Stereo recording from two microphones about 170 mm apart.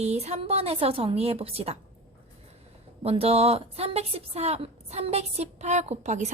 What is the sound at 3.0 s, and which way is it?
A woman's voice, 35° right (ahead or behind).